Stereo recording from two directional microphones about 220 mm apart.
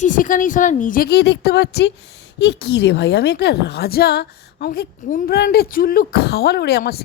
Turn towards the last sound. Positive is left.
turn(degrees=45)  # may be behind; listen again after turning